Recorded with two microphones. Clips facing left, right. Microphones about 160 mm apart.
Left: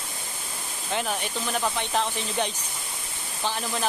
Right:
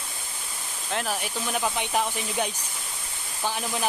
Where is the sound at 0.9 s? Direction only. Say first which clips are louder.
Left 1 dB; centre (ahead or behind).